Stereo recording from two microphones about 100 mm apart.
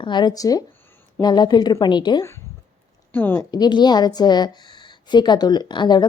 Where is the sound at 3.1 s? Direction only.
20° left (ahead or behind).